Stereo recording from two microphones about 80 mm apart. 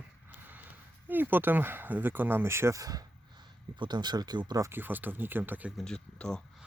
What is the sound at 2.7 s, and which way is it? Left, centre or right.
Speech, right.